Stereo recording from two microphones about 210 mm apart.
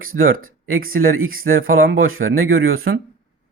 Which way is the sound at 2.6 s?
75° right (ahead or behind).